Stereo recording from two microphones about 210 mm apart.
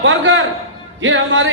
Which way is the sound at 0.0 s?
65° right (ahead or behind).